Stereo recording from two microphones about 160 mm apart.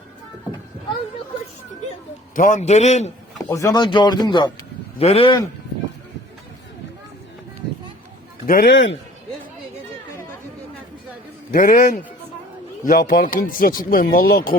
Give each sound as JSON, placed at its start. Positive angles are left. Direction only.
{"t": 2.3, "sound": "a man's voice", "side_deg": 55}
{"t": 3.3, "sound": "speech", "side_deg": 20}
{"t": 4.9, "sound": "a man's voice", "side_deg": 40}
{"t": 8.4, "sound": "speech", "side_deg": 80}
{"t": 11.5, "sound": "speech", "side_deg": 60}